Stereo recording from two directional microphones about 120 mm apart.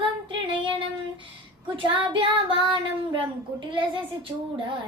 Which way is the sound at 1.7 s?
45° right (ahead or behind).